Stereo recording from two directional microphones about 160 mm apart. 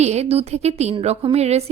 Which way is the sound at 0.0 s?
45° right (ahead or behind).